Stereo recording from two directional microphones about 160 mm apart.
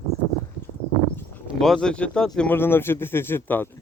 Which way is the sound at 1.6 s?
5° left (ahead or behind).